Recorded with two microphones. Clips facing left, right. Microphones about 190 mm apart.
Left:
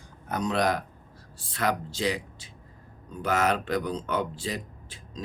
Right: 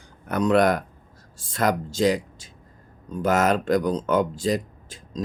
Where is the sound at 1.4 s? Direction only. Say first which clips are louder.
Right 5 dB; 45° right (ahead or behind).